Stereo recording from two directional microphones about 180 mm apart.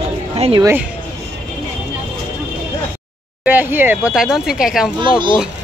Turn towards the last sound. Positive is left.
turn(degrees=-25)  # may be behind; listen again after turning